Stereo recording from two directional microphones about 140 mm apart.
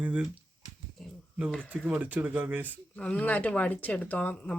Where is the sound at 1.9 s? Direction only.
10° right (ahead or behind).